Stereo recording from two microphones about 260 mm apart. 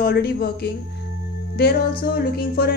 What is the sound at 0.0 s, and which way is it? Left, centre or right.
A woman's voice, left.